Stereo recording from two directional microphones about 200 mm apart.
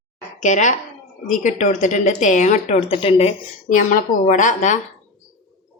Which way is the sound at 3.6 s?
40° left (ahead or behind).